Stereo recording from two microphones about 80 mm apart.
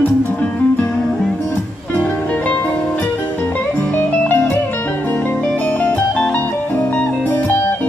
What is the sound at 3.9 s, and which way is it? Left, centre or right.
Music, left.